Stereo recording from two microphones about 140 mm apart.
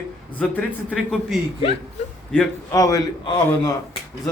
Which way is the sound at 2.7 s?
25° left (ahead or behind).